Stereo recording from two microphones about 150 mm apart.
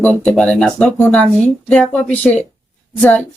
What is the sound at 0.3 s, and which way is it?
Speech, 5° left (ahead or behind).